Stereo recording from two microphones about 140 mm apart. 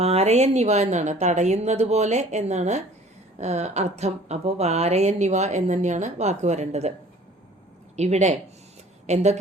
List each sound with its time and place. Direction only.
0.0 s speech: 50° right (ahead or behind)
7.9 s speech: 55° right (ahead or behind)